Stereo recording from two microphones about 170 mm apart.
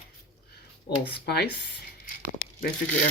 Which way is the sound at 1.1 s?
70° left (ahead or behind).